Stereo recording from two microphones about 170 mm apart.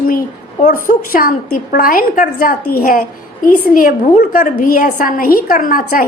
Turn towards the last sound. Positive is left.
turn(degrees=55)  # may be behind; listen again after turning